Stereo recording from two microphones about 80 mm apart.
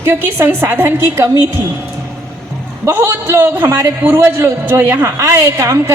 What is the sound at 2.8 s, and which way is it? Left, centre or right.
A woman's voice, right.